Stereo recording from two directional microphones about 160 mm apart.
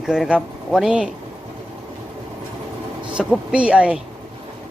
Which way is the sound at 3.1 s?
5° right (ahead or behind).